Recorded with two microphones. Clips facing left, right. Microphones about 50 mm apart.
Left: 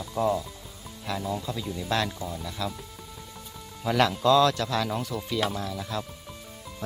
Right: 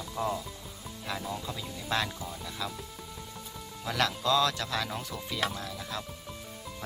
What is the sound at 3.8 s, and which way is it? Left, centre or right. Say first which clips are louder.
Speech: left 7 dB; centre.